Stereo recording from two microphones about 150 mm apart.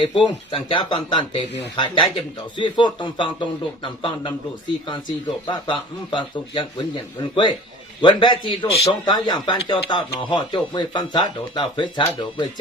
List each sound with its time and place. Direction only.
0.0 s a man's voice: 35° left (ahead or behind)
5.5 s a man's voice: 30° left (ahead or behind)